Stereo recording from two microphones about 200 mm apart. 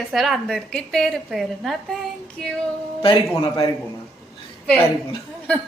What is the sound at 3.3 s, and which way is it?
Speech, 15° left (ahead or behind).